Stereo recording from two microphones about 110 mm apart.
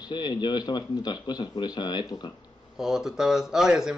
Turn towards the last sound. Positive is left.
turn(degrees=-5)  # may be behind; listen again after turning